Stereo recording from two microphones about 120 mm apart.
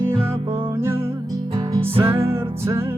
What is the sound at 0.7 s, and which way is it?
Music, 20° right (ahead or behind).